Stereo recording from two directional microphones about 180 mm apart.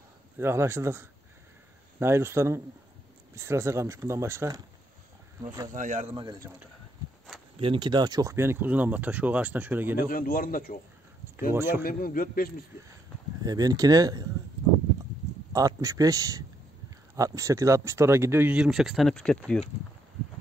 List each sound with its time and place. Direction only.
0.4 s speech: 15° right (ahead or behind)
5.8 s speech: 45° right (ahead or behind)
6.1 s speech: 25° right (ahead or behind)
7.5 s speech: 30° right (ahead or behind); by 9.9 s 10° right (ahead or behind)
9.9 s a man's voice: 55° left (ahead or behind)
11.5 s speech: 10° right (ahead or behind)
11.8 s a man's voice: 50° left (ahead or behind)
13.4 s speech: 20° right (ahead or behind)
15.5 s speech: 20° right (ahead or behind); by 19.6 s 5° left (ahead or behind)